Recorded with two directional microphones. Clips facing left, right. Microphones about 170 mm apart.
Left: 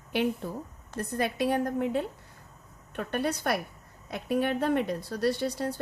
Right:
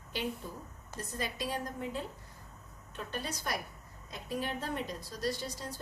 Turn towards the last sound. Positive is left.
turn(degrees=65)  # may be behind; listen again after turning